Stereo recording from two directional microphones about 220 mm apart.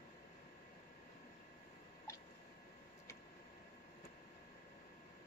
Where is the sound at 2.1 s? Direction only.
10° left (ahead or behind).